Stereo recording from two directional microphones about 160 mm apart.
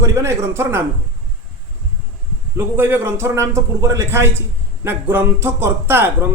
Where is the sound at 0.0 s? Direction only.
15° right (ahead or behind).